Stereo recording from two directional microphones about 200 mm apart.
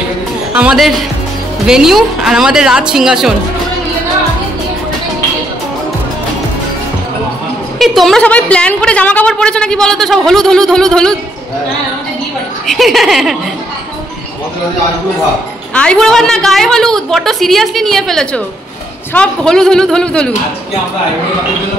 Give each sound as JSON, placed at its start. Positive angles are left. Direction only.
{"t": 0.6, "sound": "a woman's voice", "side_deg": -5}
{"t": 7.8, "sound": "a woman's voice", "side_deg": 0}
{"t": 12.6, "sound": "a woman's voice", "side_deg": 0}
{"t": 15.7, "sound": "a woman's voice", "side_deg": 5}